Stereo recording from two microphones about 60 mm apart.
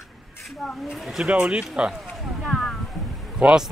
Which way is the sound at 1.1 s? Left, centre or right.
Centre.